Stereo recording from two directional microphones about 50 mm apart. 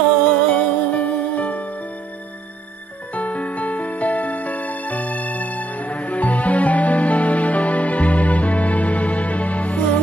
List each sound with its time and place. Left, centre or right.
0.5 s music: left
3.2 s music: left